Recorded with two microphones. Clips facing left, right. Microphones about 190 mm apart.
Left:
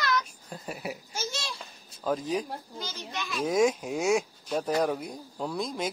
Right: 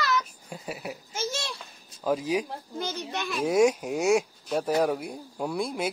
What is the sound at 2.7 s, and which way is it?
Children playing, 60° right (ahead or behind).